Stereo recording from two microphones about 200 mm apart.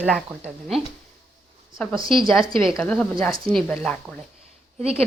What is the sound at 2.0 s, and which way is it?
Speech, 25° right (ahead or behind).